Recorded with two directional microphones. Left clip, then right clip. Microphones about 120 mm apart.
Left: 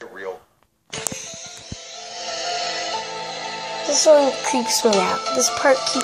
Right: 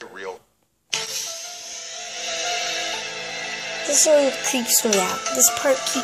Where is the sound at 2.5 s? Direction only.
5° left (ahead or behind).